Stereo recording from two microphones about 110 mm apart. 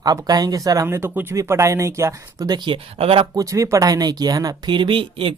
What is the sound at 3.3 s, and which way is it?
Speech, 30° right (ahead or behind).